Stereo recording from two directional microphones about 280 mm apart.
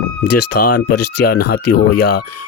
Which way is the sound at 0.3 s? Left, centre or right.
Left.